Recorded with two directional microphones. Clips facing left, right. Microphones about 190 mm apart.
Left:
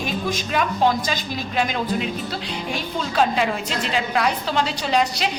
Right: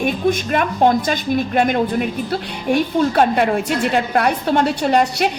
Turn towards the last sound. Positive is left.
turn(degrees=-60)  # may be behind; listen again after turning